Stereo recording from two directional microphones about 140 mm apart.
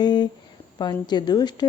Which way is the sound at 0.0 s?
30° left (ahead or behind).